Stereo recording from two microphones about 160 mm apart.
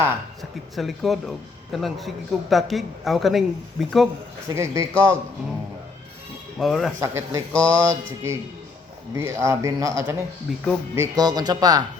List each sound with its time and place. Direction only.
0.8 s a man's voice: centre (ahead or behind)
4.4 s a man's voice: 20° right (ahead or behind)
6.6 s a man's voice: centre (ahead or behind)
7.0 s a man's voice: 15° right (ahead or behind)
10.5 s a man's voice: centre (ahead or behind)
10.9 s speech: 20° right (ahead or behind)